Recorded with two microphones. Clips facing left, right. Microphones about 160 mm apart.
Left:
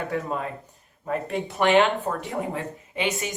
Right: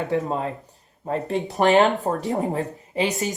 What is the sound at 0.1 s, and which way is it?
Speech, 25° right (ahead or behind).